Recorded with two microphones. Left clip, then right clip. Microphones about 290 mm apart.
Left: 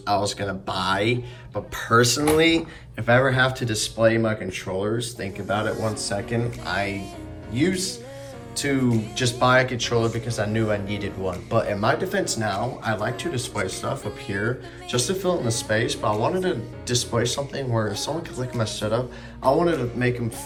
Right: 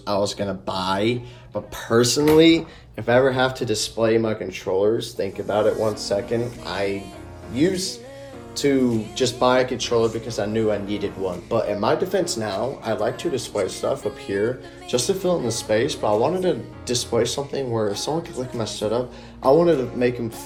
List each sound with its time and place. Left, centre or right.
0.0 s a man's voice: centre
8.5 s music: centre
9.1 s a man's voice: centre